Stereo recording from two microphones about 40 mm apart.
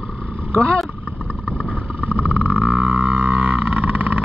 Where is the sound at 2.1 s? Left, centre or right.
Right.